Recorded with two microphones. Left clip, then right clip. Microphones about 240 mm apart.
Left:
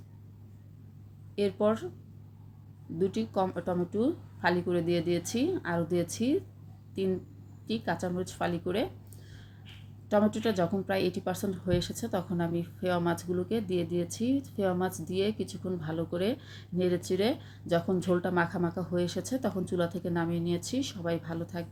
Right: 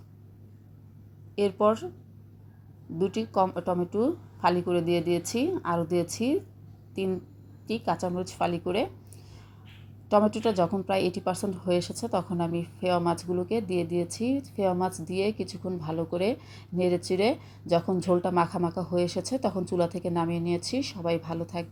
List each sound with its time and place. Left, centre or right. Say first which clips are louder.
1.4 s a woman's voice: right 4 dB; centre
3.0 s a woman's voice: right 4 dB; centre
7.7 s a woman's voice: right 4 dB; centre
10.1 s a woman's voice: right 4 dB; centre